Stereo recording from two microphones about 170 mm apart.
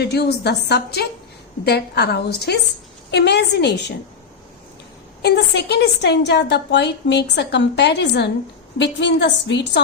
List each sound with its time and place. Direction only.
0.0 s a woman's voice: 75° left (ahead or behind)
5.2 s a woman's voice: 75° left (ahead or behind)